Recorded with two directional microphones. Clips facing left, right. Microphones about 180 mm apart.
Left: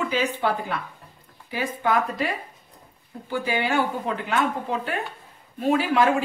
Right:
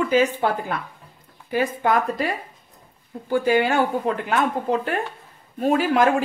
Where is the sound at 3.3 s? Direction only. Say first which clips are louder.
Right 6 dB; 45° right (ahead or behind).